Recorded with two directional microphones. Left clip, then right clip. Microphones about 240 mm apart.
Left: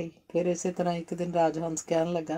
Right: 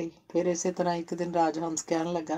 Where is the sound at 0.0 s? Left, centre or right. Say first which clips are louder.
Even; left.